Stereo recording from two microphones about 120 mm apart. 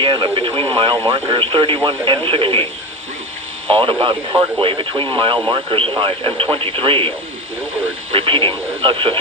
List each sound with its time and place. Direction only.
0.0 s speech: 40° right (ahead or behind)